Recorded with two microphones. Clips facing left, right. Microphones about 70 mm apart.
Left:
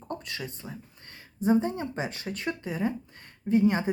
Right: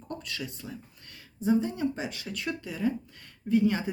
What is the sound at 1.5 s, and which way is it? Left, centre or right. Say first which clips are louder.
Speech: left 1 dB; left.